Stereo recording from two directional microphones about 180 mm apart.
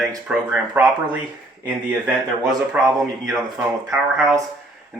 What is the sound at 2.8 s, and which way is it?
Speech, 5° right (ahead or behind).